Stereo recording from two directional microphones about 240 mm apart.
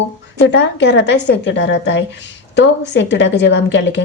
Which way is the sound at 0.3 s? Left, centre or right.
Left.